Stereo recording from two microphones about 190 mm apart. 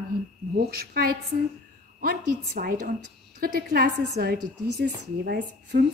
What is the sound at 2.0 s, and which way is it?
A woman's voice, 50° right (ahead or behind).